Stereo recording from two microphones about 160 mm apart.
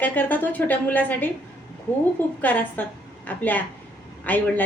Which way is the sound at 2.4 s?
10° left (ahead or behind).